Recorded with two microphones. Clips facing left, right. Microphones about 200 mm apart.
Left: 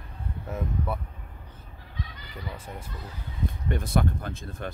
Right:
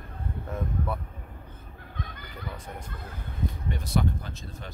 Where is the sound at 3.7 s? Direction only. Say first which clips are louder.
Left 2 dB; 55° left (ahead or behind).